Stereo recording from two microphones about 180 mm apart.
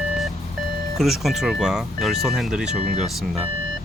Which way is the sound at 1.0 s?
Centre (ahead or behind).